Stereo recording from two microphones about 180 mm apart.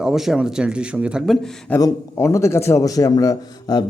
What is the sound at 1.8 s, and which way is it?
A man's voice, 20° left (ahead or behind).